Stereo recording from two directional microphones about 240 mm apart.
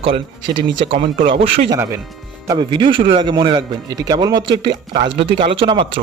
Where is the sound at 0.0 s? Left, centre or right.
Right.